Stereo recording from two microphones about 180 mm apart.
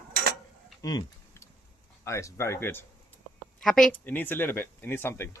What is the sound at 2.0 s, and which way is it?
Speech, 15° left (ahead or behind).